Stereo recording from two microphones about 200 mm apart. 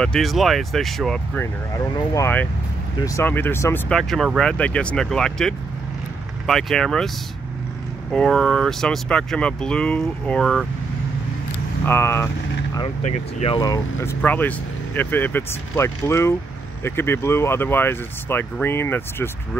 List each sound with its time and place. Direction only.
0.0 s speech: centre (ahead or behind)
3.9 s speech: centre (ahead or behind)
8.1 s speech: 5° left (ahead or behind)
11.8 s speech: 10° left (ahead or behind)
12.7 s speech: 30° left (ahead or behind)
13.6 s speech: 15° left (ahead or behind)